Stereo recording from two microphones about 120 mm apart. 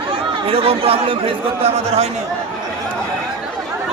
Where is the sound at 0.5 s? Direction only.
55° right (ahead or behind).